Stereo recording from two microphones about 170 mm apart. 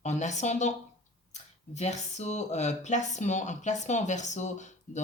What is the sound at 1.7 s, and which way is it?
Speech, 40° left (ahead or behind).